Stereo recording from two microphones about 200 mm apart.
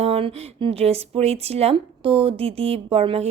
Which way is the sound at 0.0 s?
30° right (ahead or behind).